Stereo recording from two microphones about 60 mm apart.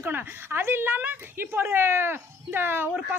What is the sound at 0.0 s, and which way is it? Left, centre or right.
A woman's voice, right.